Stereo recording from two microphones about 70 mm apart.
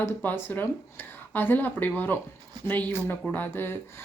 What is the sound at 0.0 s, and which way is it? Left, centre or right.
Speech, left.